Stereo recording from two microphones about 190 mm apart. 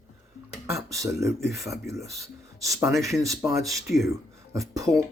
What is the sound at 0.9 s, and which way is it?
Speech, 15° right (ahead or behind).